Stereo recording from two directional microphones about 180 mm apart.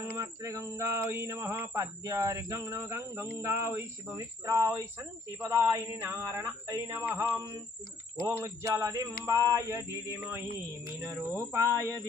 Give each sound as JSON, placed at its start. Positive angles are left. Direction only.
{"t": 0.2, "sound": "speech", "side_deg": -15}
{"t": 7.2, "sound": "a sound", "side_deg": -20}
{"t": 8.3, "sound": "speech", "side_deg": -15}